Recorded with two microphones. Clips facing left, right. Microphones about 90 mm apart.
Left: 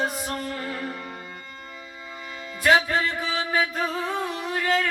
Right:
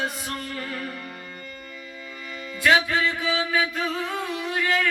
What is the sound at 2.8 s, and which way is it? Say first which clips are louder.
Singing: right 1 dB; 35° left (ahead or behind).